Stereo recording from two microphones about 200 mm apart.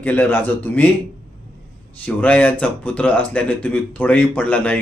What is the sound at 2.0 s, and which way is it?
Speech, 5° left (ahead or behind).